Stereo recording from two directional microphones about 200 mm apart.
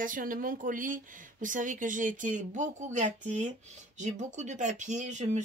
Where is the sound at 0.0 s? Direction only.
45° right (ahead or behind).